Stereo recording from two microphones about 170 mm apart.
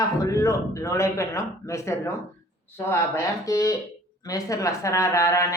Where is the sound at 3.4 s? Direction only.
20° left (ahead or behind).